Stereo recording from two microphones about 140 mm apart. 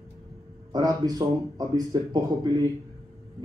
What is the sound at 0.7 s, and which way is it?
Speech, 25° right (ahead or behind).